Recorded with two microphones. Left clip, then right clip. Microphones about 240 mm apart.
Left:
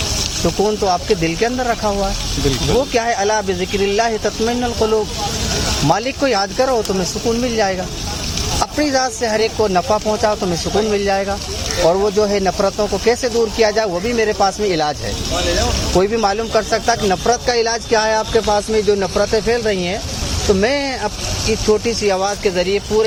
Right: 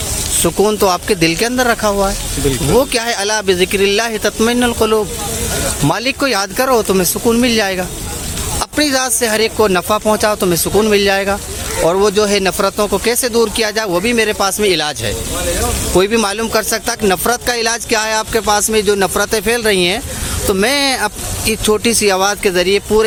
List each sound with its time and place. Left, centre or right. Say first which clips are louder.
0.4 s speech: right 4 dB; right
12.3 s speech: right 2 dB; right
16.0 s speech: right 2 dB; right